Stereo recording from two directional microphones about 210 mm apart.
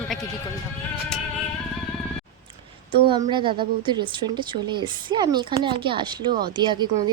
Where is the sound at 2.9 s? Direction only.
25° right (ahead or behind).